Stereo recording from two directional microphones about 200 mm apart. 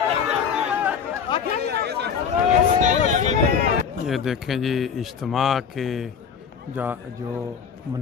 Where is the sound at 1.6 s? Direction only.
55° right (ahead or behind).